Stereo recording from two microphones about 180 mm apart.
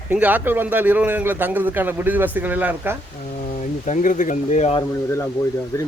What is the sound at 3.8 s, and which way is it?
Speech, 45° left (ahead or behind).